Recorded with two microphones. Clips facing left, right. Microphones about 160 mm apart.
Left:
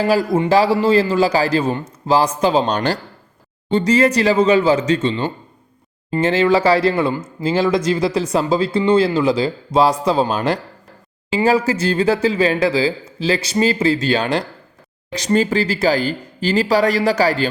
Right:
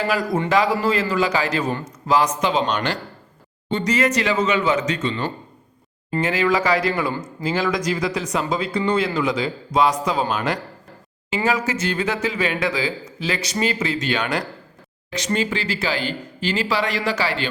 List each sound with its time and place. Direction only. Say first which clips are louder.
0.0 s speech: left 6 dB; 30° left (ahead or behind)